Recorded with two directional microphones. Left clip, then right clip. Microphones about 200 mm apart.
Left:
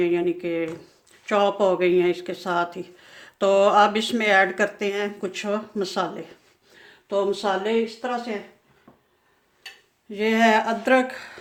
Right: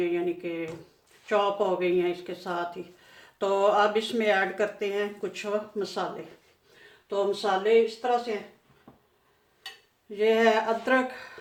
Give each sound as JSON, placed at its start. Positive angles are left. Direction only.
{"t": 0.0, "sound": "speech", "side_deg": 50}
{"t": 7.1, "sound": "speech", "side_deg": 50}
{"t": 10.1, "sound": "speech", "side_deg": 55}